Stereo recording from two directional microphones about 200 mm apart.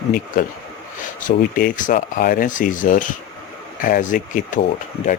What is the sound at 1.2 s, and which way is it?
Speech, 45° left (ahead or behind).